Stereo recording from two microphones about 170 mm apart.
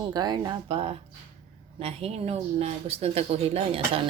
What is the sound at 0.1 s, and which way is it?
Speech, 25° right (ahead or behind).